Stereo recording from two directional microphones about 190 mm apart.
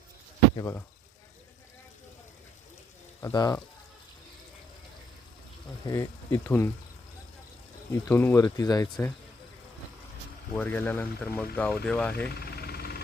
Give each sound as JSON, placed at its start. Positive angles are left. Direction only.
{"t": 0.5, "sound": "speech", "side_deg": 15}
{"t": 3.2, "sound": "speech", "side_deg": 15}
{"t": 5.8, "sound": "speech", "side_deg": 15}
{"t": 8.0, "sound": "speech", "side_deg": 10}
{"t": 10.5, "sound": "speech", "side_deg": 10}
{"t": 12.5, "sound": "vehicle", "side_deg": 55}